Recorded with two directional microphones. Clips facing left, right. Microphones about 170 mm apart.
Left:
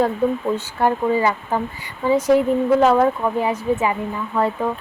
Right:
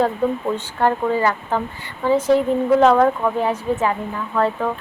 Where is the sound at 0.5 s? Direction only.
10° left (ahead or behind).